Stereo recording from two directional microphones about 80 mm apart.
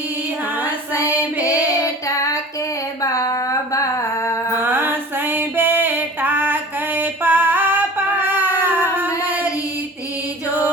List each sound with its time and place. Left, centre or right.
1.6 s female singing: left
3.0 s a sound: left
4.5 s female singing: right